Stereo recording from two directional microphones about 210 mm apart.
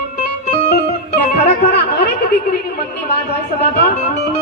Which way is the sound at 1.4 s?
50° left (ahead or behind).